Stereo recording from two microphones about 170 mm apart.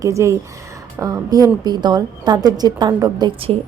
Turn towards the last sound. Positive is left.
turn(degrees=-30)  # may be behind; listen again after turning